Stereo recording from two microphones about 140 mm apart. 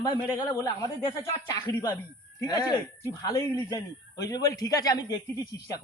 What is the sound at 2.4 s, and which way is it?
A man's voice, 25° left (ahead or behind).